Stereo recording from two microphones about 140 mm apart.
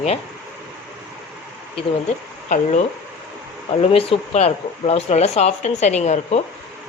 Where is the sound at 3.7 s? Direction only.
45° left (ahead or behind).